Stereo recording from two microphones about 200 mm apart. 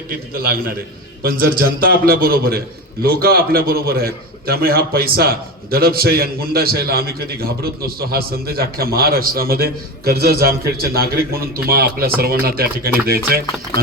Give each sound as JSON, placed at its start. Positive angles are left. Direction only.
{"t": 1.2, "sound": "a man's voice", "side_deg": -50}